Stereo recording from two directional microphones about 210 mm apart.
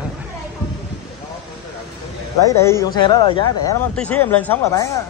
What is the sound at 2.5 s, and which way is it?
Speech, 15° left (ahead or behind).